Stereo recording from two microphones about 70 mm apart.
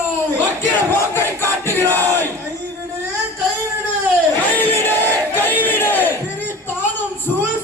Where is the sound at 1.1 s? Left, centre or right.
Left.